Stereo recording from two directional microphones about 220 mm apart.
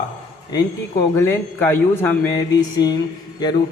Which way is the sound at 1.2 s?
10° left (ahead or behind).